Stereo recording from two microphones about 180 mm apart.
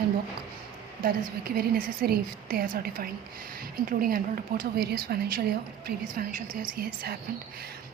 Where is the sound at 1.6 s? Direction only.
55° right (ahead or behind).